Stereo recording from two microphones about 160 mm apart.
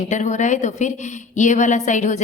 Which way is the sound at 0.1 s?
50° left (ahead or behind).